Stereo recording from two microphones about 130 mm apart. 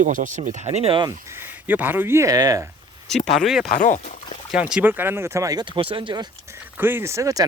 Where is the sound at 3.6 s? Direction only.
80° left.